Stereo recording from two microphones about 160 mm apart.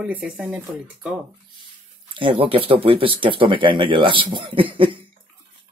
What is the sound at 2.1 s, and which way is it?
Speech, 30° right (ahead or behind).